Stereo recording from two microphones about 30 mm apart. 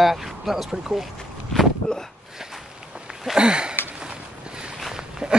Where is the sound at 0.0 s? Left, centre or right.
Centre.